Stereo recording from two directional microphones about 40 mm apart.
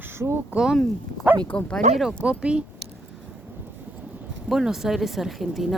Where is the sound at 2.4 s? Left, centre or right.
Right.